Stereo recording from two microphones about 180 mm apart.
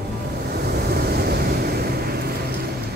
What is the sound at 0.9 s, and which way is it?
Vehicle, 60° right (ahead or behind).